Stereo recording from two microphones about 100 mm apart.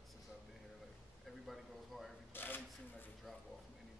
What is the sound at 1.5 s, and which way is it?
Speech, centre (ahead or behind).